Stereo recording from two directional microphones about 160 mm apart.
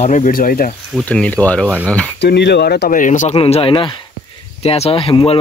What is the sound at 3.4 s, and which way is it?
Speech, 35° left (ahead or behind).